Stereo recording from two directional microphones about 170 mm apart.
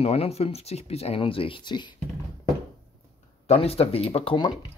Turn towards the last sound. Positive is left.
turn(degrees=30)  # may be behind; listen again after turning